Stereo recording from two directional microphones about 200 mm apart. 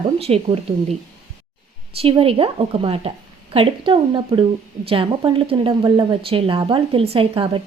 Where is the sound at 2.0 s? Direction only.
30° right (ahead or behind).